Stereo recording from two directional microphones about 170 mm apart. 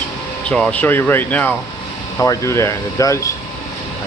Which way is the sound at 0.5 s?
5° left (ahead or behind).